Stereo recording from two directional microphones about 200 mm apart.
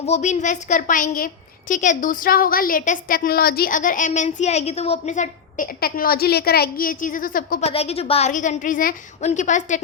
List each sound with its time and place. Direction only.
0.0 s a woman's voice: 35° left (ahead or behind)
7.7 s a woman's voice: 30° left (ahead or behind)